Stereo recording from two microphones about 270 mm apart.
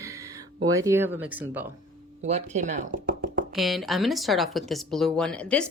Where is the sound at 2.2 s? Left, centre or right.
Right.